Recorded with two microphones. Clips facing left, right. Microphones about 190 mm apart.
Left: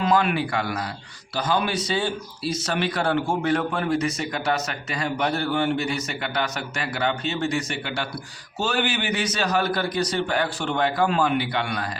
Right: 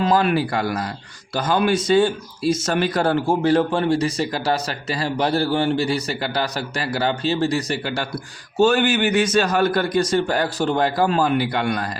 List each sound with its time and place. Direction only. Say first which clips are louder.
0.0 s speech: right 3 dB; 35° right (ahead or behind)
8.5 s a man's voice: right 8 dB; 50° right (ahead or behind)